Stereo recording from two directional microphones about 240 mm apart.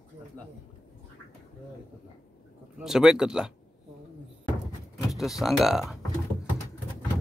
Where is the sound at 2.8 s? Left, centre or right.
Centre.